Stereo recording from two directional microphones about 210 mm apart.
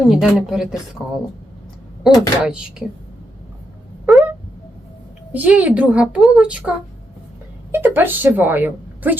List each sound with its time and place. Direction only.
0.0 s a woman's voice: centre (ahead or behind)
2.0 s a woman's voice: 5° right (ahead or behind)
4.0 s a sound: centre (ahead or behind)
5.3 s a woman's voice: 5° right (ahead or behind)